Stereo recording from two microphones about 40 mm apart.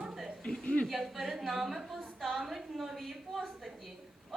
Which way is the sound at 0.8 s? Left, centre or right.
Centre.